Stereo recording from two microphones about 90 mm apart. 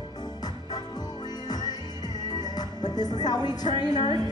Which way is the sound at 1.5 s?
50° left (ahead or behind).